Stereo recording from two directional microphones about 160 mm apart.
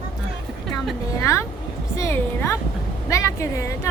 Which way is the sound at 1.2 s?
20° left (ahead or behind).